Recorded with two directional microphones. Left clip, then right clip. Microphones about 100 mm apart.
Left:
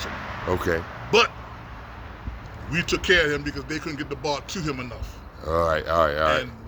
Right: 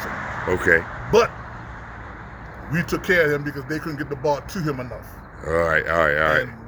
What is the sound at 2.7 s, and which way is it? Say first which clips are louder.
Speech: left 1 dB; 30° left (ahead or behind).